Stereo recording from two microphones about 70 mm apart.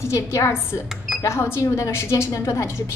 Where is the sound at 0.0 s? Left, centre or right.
Left.